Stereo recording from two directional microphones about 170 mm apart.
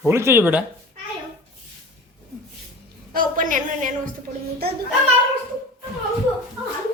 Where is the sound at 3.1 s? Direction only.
50° right (ahead or behind).